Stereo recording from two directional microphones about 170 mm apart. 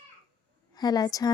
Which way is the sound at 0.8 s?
25° left (ahead or behind).